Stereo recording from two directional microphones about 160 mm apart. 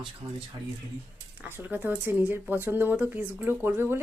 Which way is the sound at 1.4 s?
10° right (ahead or behind).